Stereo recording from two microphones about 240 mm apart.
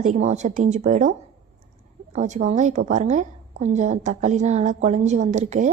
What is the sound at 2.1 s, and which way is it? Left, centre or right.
A woman's voice, right.